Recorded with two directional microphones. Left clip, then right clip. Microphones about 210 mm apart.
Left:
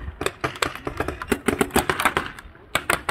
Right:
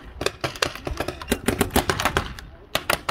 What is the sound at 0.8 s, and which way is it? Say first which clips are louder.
Typing: left 1 dB; 35° right (ahead or behind).